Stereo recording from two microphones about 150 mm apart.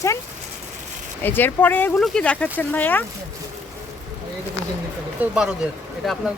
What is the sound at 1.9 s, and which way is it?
Speech, 5° left (ahead or behind).